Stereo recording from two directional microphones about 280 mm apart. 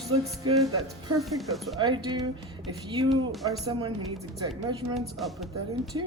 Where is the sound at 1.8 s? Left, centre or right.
Centre.